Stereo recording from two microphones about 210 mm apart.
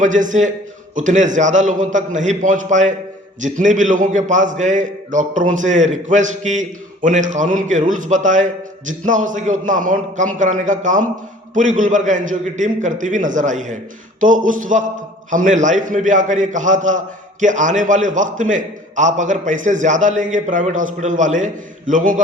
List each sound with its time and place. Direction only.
0.0 s a man's voice: 35° right (ahead or behind)